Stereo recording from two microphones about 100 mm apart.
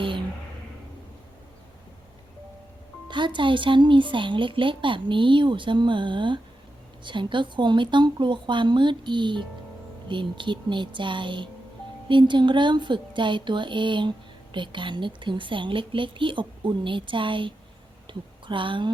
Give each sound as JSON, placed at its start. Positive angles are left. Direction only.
{"t": 3.1, "sound": "a woman's voice", "side_deg": -50}